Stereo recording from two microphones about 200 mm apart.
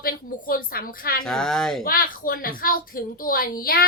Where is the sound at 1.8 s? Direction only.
45° left (ahead or behind).